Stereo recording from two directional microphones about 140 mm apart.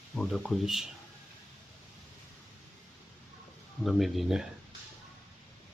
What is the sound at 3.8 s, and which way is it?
Speech, centre (ahead or behind).